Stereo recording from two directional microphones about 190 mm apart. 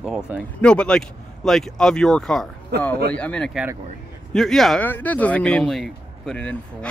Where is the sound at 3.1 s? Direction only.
5° left (ahead or behind).